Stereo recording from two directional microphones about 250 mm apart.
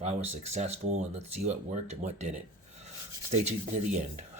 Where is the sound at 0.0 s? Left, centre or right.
Right.